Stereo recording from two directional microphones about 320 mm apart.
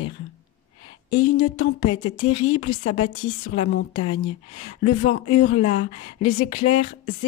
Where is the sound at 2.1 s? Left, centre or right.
Centre.